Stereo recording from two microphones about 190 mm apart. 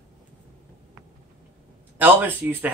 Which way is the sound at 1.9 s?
10° right (ahead or behind).